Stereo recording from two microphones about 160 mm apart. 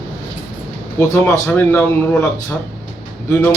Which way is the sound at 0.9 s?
15° left (ahead or behind).